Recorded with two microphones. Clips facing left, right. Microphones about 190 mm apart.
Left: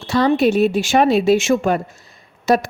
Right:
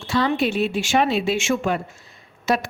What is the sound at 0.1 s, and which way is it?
A woman's voice, 40° left (ahead or behind).